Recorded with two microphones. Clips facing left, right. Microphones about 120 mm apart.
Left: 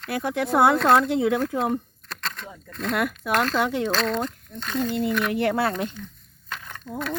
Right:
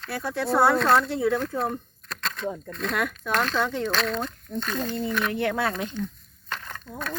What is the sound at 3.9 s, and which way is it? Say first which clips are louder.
Speech: left 2 dB; 30° left (ahead or behind).